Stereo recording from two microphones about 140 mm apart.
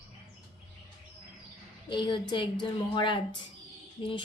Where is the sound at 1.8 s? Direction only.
35° left (ahead or behind).